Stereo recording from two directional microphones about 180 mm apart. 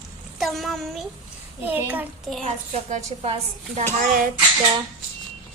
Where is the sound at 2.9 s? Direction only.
35° right (ahead or behind).